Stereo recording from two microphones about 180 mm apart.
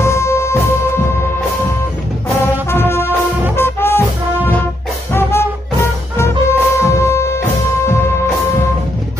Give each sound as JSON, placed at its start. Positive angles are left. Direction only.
{"t": 0.0, "sound": "music", "side_deg": 15}
{"t": 2.7, "sound": "brass instrument", "side_deg": 10}
{"t": 3.5, "sound": "music", "side_deg": 15}
{"t": 5.1, "sound": "music", "side_deg": 15}